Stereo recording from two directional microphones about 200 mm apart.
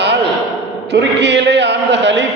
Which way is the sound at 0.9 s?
60° right (ahead or behind).